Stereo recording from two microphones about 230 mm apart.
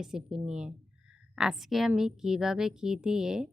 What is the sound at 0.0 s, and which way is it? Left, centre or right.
A woman's voice, centre.